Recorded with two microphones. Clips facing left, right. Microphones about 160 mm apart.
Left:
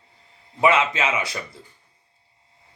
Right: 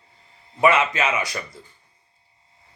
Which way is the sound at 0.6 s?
25° left (ahead or behind).